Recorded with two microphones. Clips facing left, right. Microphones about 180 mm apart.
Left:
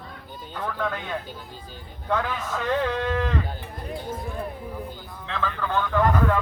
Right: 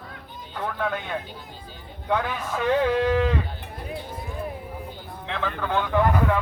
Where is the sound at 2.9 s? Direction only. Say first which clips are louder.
Right 5 dB; 10° right (ahead or behind).